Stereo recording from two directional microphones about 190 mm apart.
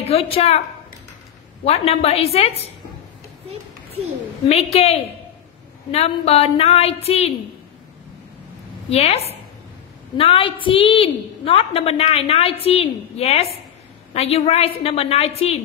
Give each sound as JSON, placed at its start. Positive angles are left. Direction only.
{"t": 0.0, "sound": "a woman's voice", "side_deg": 30}
{"t": 1.6, "sound": "a woman's voice", "side_deg": 30}
{"t": 4.5, "sound": "a woman's voice", "side_deg": 35}
{"t": 8.9, "sound": "a woman's voice", "side_deg": 35}